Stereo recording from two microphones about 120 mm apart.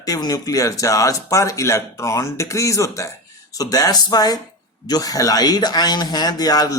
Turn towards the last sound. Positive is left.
turn(degrees=30)  # may be behind; listen again after turning